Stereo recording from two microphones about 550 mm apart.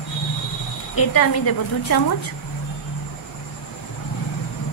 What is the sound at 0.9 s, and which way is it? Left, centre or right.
A woman's voice, left.